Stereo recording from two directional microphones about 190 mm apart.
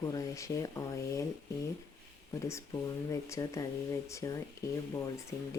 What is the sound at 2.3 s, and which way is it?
Speech, 15° left (ahead or behind).